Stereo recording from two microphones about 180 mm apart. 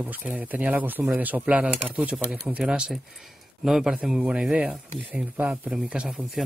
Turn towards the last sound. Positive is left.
turn(degrees=-5)  # may be behind; listen again after turning